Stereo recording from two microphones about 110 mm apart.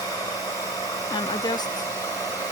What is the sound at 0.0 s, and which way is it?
Hair dryer, 30° left (ahead or behind).